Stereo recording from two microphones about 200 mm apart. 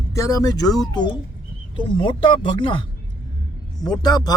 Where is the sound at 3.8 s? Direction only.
20° left (ahead or behind).